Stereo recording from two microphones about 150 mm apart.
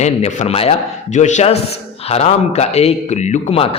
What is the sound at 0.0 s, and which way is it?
A man's voice, 50° left (ahead or behind).